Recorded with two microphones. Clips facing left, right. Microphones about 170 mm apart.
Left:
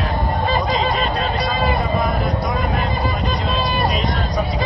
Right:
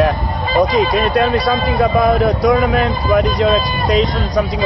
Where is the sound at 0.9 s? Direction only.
65° right (ahead or behind).